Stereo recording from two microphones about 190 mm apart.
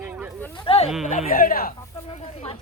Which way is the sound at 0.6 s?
35° left (ahead or behind).